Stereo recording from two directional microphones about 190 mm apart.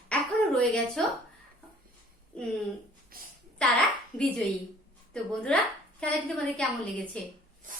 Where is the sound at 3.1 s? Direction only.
50° right (ahead or behind).